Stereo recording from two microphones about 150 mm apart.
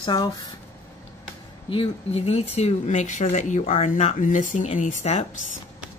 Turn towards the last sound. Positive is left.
turn(degrees=45)  # may be behind; listen again after turning